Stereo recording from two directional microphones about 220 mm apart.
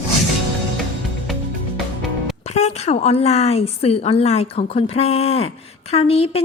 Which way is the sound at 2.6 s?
30° left (ahead or behind).